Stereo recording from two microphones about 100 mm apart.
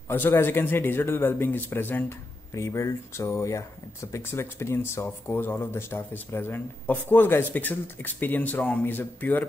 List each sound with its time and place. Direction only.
0.1 s speech: 20° left (ahead or behind)